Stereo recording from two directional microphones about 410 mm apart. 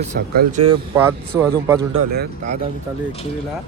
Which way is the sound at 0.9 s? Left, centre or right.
Centre.